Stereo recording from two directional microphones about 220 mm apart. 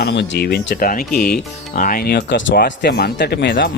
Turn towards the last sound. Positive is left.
turn(degrees=45)  # may be behind; listen again after turning